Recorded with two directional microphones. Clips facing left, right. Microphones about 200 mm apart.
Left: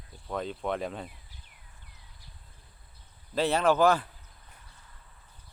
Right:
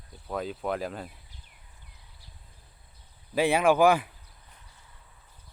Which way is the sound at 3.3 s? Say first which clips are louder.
Right 2 dB; 10° right (ahead or behind).